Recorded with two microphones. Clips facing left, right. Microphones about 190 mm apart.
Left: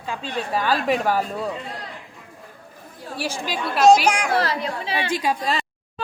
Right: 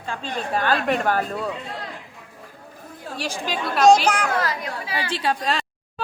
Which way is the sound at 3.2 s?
10° left (ahead or behind).